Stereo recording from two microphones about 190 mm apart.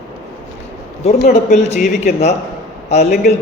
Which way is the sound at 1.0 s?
35° left (ahead or behind).